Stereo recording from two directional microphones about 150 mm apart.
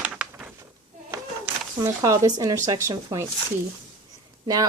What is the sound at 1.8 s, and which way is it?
Speech, 25° right (ahead or behind).